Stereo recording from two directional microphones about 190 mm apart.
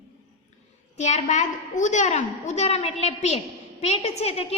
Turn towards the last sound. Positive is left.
turn(degrees=30)  # may be behind; listen again after turning